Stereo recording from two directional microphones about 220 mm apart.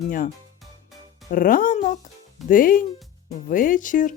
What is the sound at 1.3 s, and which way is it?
Speech, 40° left (ahead or behind).